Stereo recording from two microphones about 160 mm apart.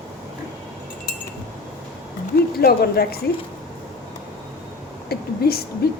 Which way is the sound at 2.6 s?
75° left (ahead or behind).